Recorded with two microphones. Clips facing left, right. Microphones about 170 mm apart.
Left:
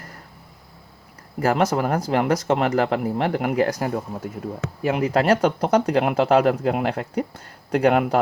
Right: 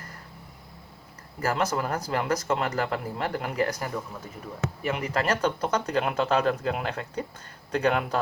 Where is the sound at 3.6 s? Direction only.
35° left (ahead or behind).